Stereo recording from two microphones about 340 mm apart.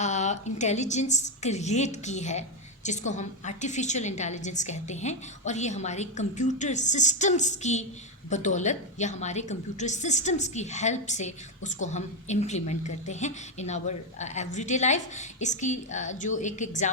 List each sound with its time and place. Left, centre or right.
0.0 s a woman's voice: centre